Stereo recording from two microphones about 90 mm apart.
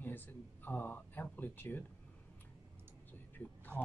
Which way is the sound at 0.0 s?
20° left (ahead or behind).